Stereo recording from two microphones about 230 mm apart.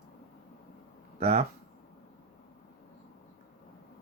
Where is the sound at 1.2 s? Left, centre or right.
Right.